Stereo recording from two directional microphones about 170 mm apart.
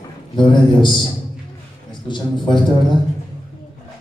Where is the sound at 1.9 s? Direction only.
25° left (ahead or behind).